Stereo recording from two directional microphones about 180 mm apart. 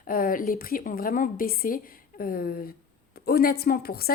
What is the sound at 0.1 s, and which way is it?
A woman's voice, 50° left (ahead or behind).